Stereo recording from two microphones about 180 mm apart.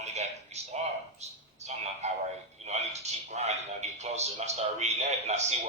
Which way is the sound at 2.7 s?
40° right (ahead or behind).